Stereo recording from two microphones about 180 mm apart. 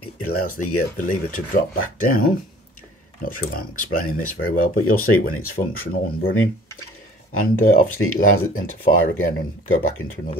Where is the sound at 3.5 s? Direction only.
50° left (ahead or behind).